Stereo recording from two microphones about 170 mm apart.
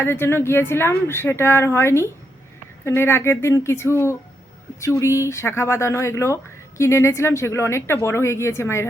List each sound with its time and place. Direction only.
0.0 s speech: 15° left (ahead or behind)